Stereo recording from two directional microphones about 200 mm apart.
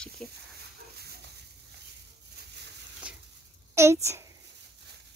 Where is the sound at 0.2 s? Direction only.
5° left (ahead or behind).